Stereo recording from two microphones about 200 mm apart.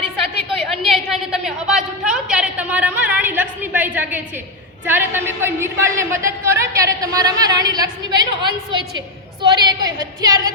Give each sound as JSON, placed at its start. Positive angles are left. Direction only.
{"t": 0.8, "sound": "a woman's voice", "side_deg": 0}